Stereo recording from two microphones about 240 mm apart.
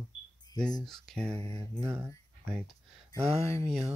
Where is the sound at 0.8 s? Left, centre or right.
Centre.